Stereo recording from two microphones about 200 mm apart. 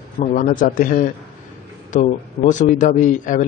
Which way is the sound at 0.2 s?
40° left (ahead or behind).